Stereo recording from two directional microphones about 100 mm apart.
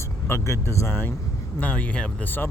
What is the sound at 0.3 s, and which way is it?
Speech, 25° left (ahead or behind).